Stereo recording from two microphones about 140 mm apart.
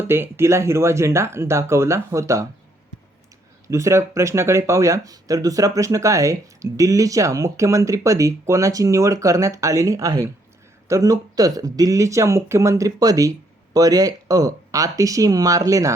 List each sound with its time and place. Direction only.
0.0 s speech: 15° right (ahead or behind)
3.7 s speech: 20° right (ahead or behind)